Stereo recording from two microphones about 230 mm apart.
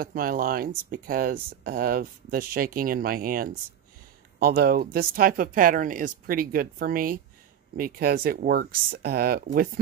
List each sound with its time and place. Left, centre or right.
0.0 s speech: right